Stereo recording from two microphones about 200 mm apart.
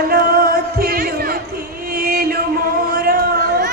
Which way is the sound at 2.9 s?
50° right (ahead or behind).